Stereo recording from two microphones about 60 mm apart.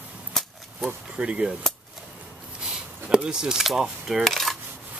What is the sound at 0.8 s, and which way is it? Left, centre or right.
Speech, centre.